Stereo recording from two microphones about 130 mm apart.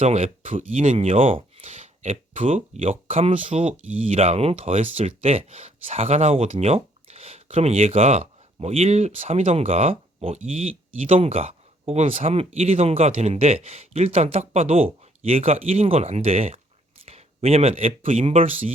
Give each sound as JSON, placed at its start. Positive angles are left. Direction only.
{"t": 0.0, "sound": "speech", "side_deg": -55}
{"t": 2.4, "sound": "speech", "side_deg": -70}
{"t": 2.8, "sound": "speech", "side_deg": -50}